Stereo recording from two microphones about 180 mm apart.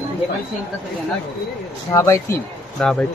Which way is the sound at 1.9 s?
15° left (ahead or behind).